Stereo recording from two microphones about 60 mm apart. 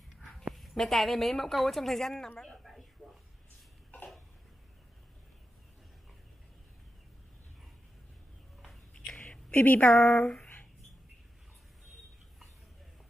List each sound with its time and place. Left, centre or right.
0.6 s a woman's voice: centre
8.9 s whispering: centre
9.5 s a woman's voice: left